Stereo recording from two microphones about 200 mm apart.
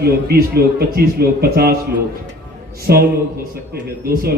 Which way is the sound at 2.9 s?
50° right (ahead or behind).